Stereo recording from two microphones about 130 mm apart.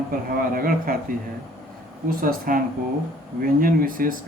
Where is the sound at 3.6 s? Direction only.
90° right.